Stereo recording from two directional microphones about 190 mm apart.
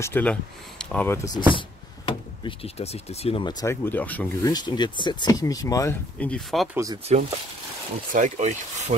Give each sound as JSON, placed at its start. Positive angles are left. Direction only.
{"t": 0.0, "sound": "speech", "side_deg": 10}
{"t": 4.5, "sound": "speech", "side_deg": 20}
{"t": 6.1, "sound": "speech", "side_deg": 5}
{"t": 8.1, "sound": "speech", "side_deg": -40}